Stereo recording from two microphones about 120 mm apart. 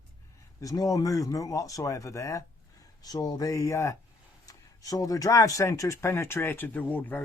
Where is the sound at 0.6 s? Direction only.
30° left (ahead or behind).